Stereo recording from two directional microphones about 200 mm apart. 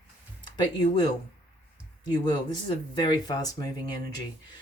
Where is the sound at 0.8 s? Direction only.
25° left (ahead or behind).